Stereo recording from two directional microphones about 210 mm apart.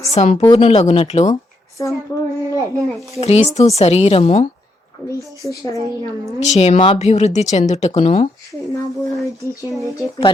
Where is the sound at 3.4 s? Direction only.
30° left (ahead or behind).